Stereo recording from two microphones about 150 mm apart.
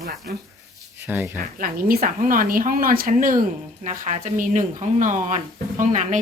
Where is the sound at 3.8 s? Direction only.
55° right (ahead or behind).